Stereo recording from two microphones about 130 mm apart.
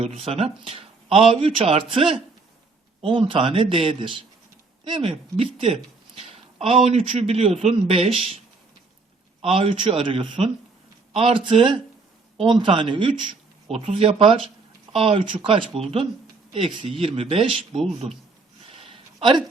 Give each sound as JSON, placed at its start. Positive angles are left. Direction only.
{"t": 0.0, "sound": "speech", "side_deg": -50}
{"t": 9.4, "sound": "speech", "side_deg": -45}
{"t": 18.7, "sound": "a sound", "side_deg": -45}